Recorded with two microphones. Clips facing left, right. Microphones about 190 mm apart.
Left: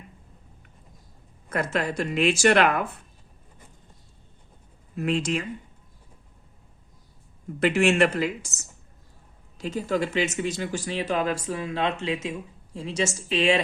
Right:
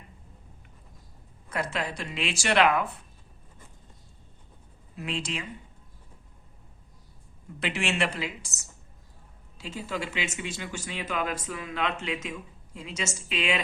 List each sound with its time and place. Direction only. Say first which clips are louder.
1.5 s speech: left 5 dB; 50° left (ahead or behind)
4.9 s speech: left 8 dB; 50° left (ahead or behind)
7.6 s speech: left 9 dB; 45° left (ahead or behind)